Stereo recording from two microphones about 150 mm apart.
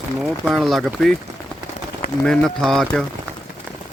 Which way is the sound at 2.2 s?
5° left (ahead or behind).